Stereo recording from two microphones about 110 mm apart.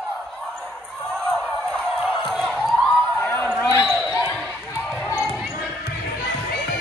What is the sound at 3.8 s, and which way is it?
Basketball bounce, centre (ahead or behind).